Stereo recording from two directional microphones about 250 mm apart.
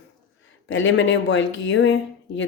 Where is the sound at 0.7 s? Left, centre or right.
Left.